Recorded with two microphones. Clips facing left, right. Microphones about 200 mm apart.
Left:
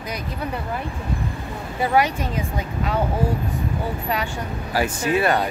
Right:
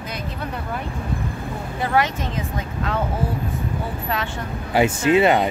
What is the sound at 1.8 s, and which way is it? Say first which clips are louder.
Speech: left 2 dB; 10° left (ahead or behind).